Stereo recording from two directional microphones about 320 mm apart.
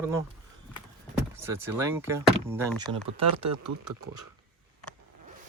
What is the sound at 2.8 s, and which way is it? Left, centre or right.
Speech, centre.